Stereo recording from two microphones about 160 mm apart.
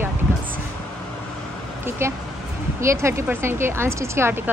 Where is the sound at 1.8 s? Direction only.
15° right (ahead or behind).